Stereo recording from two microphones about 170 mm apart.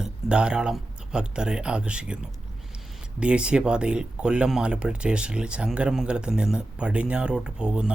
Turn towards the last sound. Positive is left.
turn(degrees=-5)  # may be behind; listen again after turning